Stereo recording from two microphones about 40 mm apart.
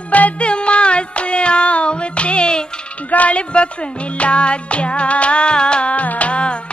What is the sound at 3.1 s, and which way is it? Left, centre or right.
Music, left.